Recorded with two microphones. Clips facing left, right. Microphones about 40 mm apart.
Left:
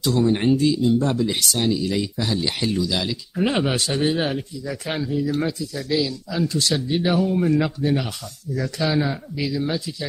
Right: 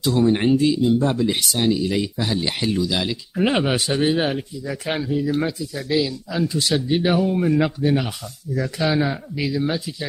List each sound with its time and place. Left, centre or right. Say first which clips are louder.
0.0 s speech: right 1 dB; centre